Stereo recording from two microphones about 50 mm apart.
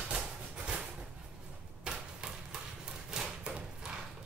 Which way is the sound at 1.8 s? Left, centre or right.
Centre.